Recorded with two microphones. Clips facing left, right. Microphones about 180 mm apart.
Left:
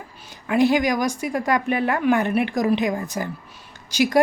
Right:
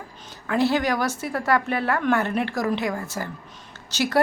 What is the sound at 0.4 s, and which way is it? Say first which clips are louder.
Speech: left 3 dB; 15° left (ahead or behind).